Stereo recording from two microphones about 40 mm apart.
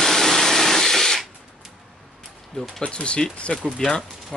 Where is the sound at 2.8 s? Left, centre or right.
Left.